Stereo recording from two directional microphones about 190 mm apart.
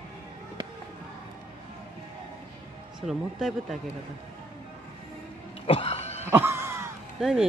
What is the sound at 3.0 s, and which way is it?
Speech, centre (ahead or behind).